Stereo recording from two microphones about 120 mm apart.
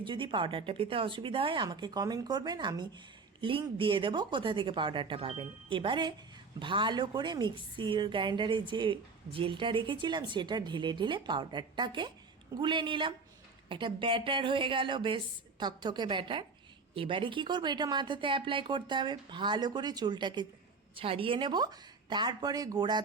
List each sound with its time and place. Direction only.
0.0 s a woman's voice: 40° right (ahead or behind)
20.9 s a woman's voice: 50° right (ahead or behind); by 23.0 s 35° right (ahead or behind)